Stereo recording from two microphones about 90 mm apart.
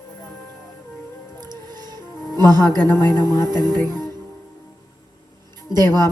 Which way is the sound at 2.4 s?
50° right (ahead or behind).